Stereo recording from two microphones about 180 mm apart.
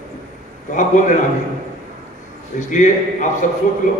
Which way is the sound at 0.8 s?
45° left (ahead or behind).